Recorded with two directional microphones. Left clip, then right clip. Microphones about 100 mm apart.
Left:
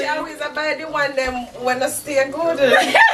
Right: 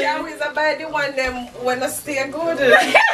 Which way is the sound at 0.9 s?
15° left (ahead or behind).